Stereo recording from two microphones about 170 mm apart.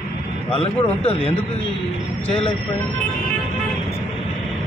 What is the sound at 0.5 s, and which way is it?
Speech, 35° left (ahead or behind).